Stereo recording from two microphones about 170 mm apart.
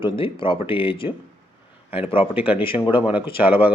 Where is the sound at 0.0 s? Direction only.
30° left (ahead or behind).